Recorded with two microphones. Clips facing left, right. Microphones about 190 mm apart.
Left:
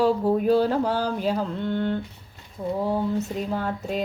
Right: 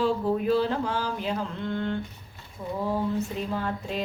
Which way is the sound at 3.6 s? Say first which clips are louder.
Left 3 dB; 45° left (ahead or behind).